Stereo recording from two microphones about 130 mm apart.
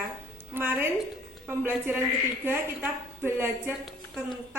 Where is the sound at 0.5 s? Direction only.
15° right (ahead or behind).